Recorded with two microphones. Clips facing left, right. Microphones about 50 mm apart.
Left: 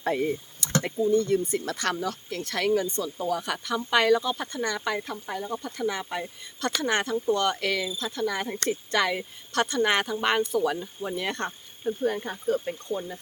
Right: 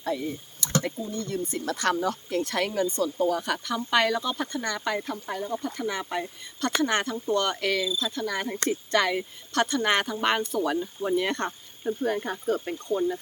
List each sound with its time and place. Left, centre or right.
0.0 s speech: left
0.8 s speech: left
1.5 s speech: centre
2.0 s speech: centre